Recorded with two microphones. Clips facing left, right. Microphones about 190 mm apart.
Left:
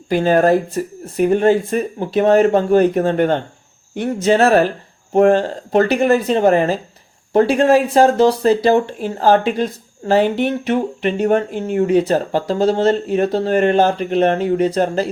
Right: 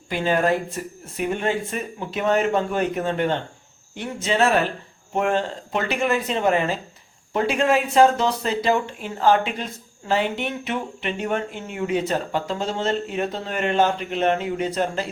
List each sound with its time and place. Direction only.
0.1 s speech: 40° left (ahead or behind)